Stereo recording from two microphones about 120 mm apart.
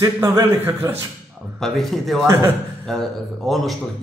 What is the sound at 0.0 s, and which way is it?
Speech, 25° right (ahead or behind).